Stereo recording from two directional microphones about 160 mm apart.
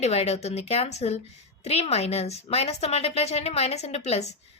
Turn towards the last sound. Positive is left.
turn(degrees=45)  # may be behind; listen again after turning